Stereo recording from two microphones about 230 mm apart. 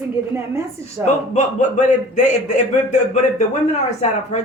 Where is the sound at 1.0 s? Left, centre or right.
Left.